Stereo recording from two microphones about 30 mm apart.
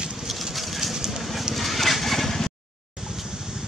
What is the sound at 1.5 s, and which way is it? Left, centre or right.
Vehicle, centre.